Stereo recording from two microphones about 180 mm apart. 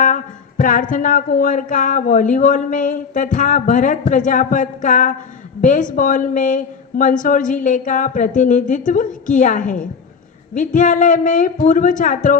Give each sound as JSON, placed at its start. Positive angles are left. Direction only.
{"t": 0.0, "sound": "a woman's voice", "side_deg": 50}